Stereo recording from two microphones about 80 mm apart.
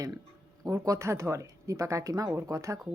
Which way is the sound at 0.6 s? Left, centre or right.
Right.